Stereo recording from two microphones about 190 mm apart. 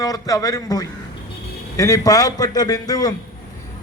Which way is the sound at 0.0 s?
20° left (ahead or behind).